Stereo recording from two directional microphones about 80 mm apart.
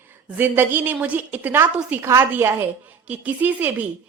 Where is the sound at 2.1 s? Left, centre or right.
Right.